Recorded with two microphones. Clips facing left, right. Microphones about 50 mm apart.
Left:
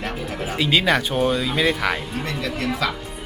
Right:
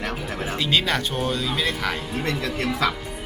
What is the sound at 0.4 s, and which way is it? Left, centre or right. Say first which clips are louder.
Speech: left 4 dB; centre.